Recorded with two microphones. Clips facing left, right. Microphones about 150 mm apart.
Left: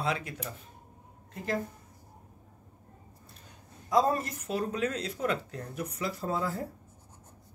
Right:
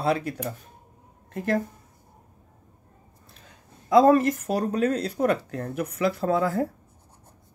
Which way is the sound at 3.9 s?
80° right.